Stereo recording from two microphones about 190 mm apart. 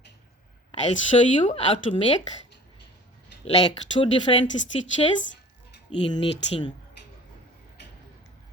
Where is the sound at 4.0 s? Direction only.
30° left (ahead or behind).